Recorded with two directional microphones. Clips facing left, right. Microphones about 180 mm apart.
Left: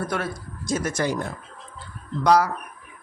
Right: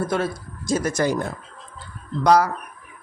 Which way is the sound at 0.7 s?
35° right (ahead or behind).